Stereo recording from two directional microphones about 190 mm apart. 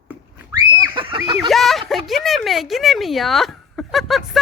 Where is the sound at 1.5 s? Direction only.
Centre (ahead or behind).